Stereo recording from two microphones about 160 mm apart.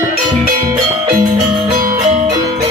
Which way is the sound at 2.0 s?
50° right (ahead or behind).